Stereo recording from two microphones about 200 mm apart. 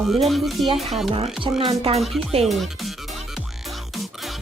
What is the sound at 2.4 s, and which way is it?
Speech, centre (ahead or behind).